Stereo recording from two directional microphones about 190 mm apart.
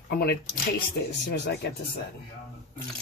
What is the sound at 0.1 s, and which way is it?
Speech, 55° left (ahead or behind).